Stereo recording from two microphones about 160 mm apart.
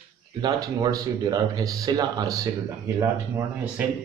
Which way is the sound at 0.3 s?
25° right (ahead or behind).